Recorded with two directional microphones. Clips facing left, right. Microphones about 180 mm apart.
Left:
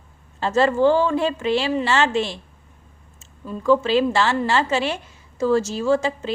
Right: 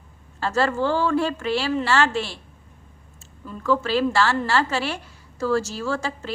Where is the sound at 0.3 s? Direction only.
20° left (ahead or behind).